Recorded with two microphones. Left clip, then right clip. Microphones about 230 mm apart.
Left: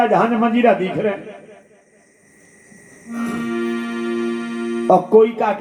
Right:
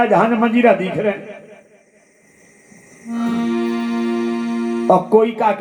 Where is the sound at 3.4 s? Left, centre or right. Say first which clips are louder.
Right 2 dB; right.